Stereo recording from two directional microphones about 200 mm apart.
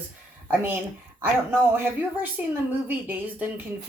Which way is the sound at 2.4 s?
10° right (ahead or behind).